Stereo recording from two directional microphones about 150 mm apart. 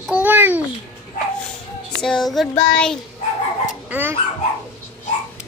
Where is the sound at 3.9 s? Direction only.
15° right (ahead or behind).